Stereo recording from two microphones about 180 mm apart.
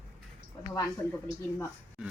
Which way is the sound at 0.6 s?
20° left (ahead or behind).